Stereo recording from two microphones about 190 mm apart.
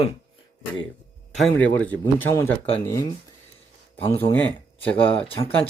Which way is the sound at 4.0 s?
30° left (ahead or behind).